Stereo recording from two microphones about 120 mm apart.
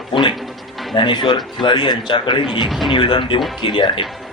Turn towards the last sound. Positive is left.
turn(degrees=45)  # may be behind; listen again after turning